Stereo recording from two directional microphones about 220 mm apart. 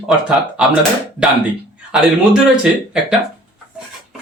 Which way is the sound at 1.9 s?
Centre (ahead or behind).